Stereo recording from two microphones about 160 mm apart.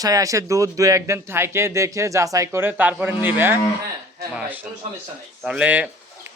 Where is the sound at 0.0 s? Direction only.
20° right (ahead or behind).